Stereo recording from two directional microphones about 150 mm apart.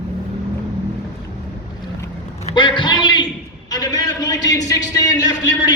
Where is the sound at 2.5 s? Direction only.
30° left (ahead or behind).